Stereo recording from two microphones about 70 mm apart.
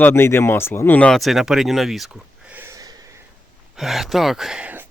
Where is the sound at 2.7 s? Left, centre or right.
Right.